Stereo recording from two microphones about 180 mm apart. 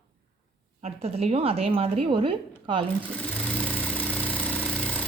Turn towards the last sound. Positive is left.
turn(degrees=10)  # may be behind; listen again after turning